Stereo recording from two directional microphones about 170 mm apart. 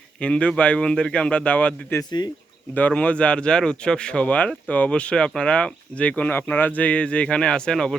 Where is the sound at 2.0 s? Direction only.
25° left (ahead or behind).